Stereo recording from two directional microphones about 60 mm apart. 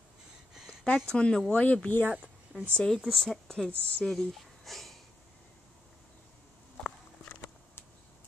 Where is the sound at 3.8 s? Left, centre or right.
Left.